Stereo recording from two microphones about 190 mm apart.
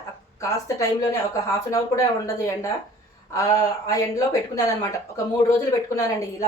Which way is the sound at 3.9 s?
15° left (ahead or behind).